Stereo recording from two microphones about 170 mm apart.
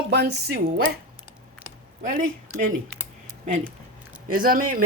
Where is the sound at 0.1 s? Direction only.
70° right (ahead or behind).